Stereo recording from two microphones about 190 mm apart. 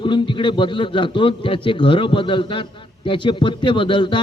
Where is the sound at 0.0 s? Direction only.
25° left (ahead or behind).